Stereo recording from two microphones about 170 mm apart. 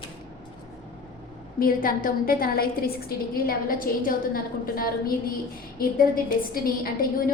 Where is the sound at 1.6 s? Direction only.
55° left (ahead or behind).